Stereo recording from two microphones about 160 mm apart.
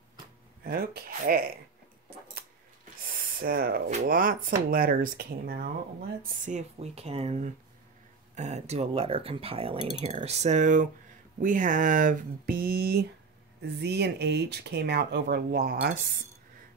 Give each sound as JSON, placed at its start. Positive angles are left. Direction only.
{"t": 0.7, "sound": "speech", "side_deg": -70}
{"t": 3.3, "sound": "speech", "side_deg": -65}
{"t": 6.4, "sound": "speech", "side_deg": -45}
{"t": 13.7, "sound": "speech", "side_deg": -90}